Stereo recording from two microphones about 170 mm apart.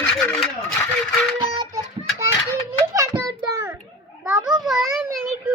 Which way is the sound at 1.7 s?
15° right (ahead or behind).